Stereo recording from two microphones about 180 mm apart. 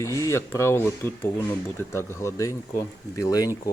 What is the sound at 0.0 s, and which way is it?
Speech, 15° left (ahead or behind).